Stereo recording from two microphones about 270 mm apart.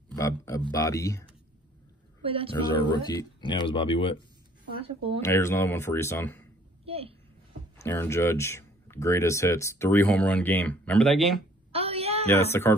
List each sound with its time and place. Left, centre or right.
0.1 s speech: centre
2.2 s speech: right
2.5 s speech: centre
4.8 s speech: right
5.2 s speech: centre
6.8 s a woman's voice: right
7.8 s speech: centre
11.7 s a sound: right
12.3 s speech: centre